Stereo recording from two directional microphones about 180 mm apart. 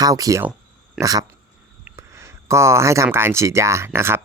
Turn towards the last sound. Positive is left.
turn(degrees=-15)  # may be behind; listen again after turning